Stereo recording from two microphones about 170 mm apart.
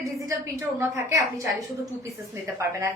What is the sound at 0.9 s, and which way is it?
A woman's voice, 20° right (ahead or behind).